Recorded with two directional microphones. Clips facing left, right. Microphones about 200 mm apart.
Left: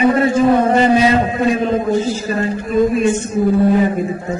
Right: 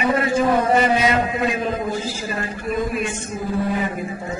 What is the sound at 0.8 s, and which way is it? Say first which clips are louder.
A woman's voice: left 6 dB; 30° left (ahead or behind).